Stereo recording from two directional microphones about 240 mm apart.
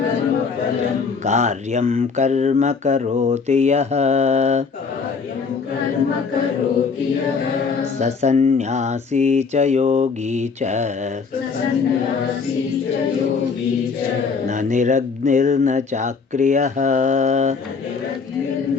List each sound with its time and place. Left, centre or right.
1.2 s speech: right
7.9 s speech: right
14.4 s speech: right